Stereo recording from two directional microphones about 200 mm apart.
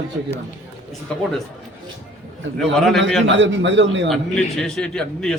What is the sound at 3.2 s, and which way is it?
Speech, 65° right (ahead or behind).